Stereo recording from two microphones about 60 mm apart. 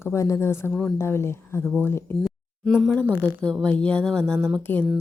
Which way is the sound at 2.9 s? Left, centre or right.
Left.